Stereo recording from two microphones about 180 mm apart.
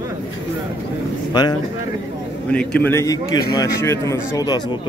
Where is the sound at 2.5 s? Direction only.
5° left (ahead or behind).